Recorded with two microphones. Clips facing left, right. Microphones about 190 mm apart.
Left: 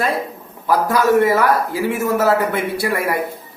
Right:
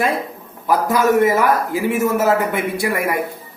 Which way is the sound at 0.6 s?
15° right (ahead or behind).